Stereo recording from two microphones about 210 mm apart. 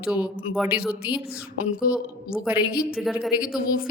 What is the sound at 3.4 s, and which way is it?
Speech, 45° left (ahead or behind).